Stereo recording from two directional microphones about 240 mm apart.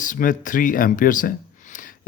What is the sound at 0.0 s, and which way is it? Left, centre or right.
Speech, left.